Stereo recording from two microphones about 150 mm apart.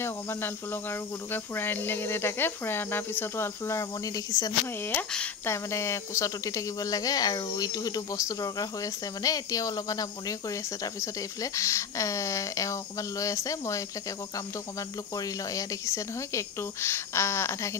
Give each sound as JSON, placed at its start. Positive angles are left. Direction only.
{"t": 0.0, "sound": "cricket", "side_deg": 15}
{"t": 4.8, "sound": "speech", "side_deg": 10}
{"t": 15.1, "sound": "speech", "side_deg": 20}